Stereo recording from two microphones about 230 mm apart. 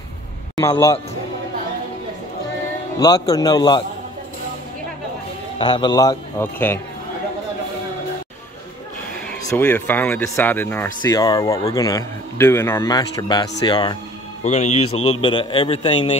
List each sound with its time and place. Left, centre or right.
0.6 s speech: centre
3.0 s speech: centre
5.6 s speech: centre
9.3 s speech: centre
14.4 s speech: left